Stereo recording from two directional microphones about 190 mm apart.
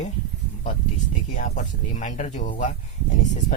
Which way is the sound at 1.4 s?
40° left (ahead or behind).